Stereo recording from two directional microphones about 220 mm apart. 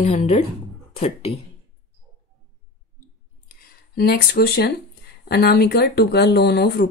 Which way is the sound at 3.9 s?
45° left (ahead or behind).